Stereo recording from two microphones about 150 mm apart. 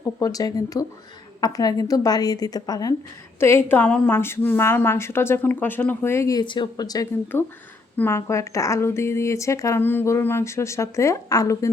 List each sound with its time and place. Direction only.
0.2 s a woman's voice: 25° left (ahead or behind)
7.3 s a woman's voice: 15° left (ahead or behind)